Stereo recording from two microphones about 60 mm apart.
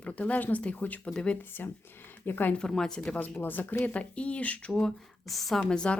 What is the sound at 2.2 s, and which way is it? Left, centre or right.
Speech, left.